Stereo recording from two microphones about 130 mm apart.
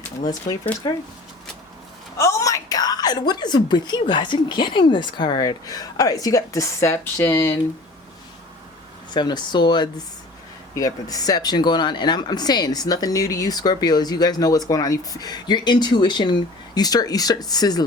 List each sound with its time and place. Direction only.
0.3 s a woman's voice: 30° left (ahead or behind)
2.1 s a woman's voice: 25° left (ahead or behind)
9.1 s a woman's voice: 35° left (ahead or behind)